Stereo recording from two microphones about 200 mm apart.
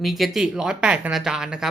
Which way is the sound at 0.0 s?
Centre (ahead or behind).